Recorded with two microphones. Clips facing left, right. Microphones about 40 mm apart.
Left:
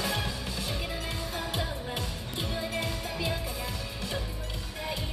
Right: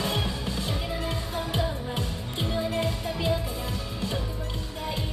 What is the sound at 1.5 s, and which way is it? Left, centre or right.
Music, right.